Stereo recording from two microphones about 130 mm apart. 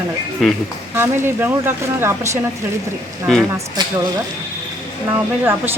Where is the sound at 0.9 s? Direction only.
20° right (ahead or behind).